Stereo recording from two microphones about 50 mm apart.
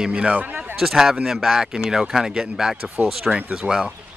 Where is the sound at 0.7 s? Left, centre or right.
Centre.